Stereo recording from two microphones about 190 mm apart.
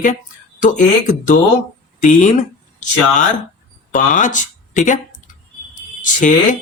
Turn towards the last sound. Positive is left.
turn(degrees=40)  # may be behind; listen again after turning